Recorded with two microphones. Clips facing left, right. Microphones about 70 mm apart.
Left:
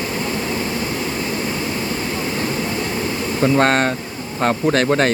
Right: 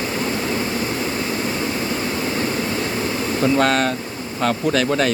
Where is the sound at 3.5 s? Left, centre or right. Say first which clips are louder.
Left 3 dB; left.